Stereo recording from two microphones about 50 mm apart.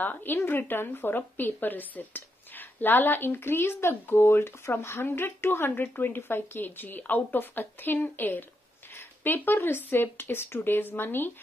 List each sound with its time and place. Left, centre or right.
0.0 s a woman's voice: left